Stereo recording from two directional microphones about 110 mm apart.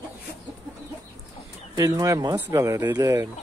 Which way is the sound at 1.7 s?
30° right (ahead or behind).